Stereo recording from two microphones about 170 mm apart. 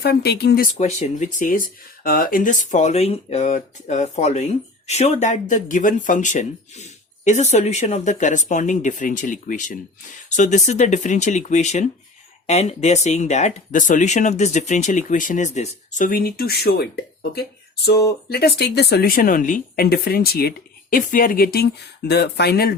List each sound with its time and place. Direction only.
0.0 s speech: 70° left (ahead or behind)
0.7 s speech: 40° left (ahead or behind); by 20.5 s 65° left (ahead or behind)
20.9 s speech: 55° left (ahead or behind)